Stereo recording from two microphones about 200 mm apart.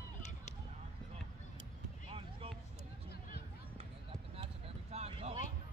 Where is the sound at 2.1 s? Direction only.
30° right (ahead or behind).